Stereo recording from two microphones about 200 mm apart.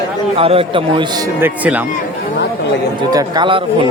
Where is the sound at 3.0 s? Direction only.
20° right (ahead or behind).